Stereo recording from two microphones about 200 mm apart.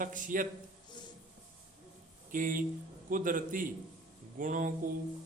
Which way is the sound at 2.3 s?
45° right (ahead or behind).